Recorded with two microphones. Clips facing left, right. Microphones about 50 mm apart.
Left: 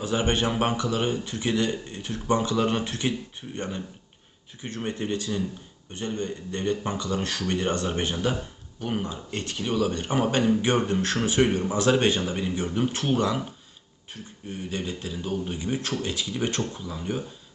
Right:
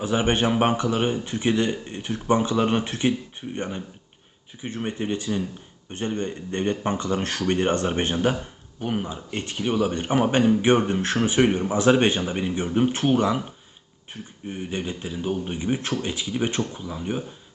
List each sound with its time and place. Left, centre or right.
0.0 s speech: right
5.9 s speech: right
8.8 s speech: centre